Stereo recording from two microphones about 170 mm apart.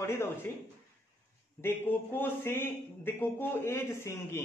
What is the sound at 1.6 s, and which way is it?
A man's voice, 15° left (ahead or behind).